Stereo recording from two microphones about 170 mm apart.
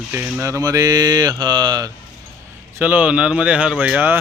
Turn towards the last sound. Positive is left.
turn(degrees=-10)  # may be behind; listen again after turning